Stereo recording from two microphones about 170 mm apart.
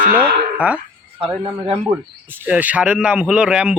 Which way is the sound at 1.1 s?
35° right (ahead or behind).